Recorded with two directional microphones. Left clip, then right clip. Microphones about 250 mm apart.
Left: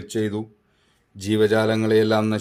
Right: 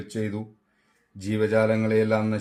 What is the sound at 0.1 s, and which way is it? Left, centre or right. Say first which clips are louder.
Speech: left 7 dB; left.